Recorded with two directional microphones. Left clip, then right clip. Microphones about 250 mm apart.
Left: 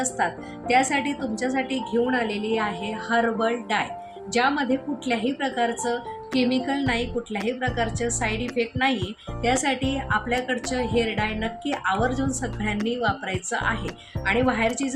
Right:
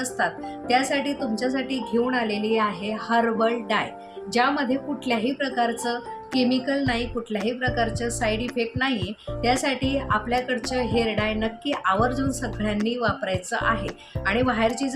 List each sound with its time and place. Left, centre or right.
0.7 s a woman's voice: centre